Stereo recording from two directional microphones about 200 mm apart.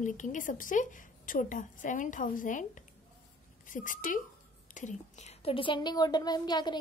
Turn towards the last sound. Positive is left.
turn(degrees=20)  # may be behind; listen again after turning